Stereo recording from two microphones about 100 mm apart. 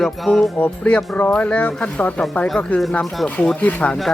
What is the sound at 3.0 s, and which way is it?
Rub, centre (ahead or behind).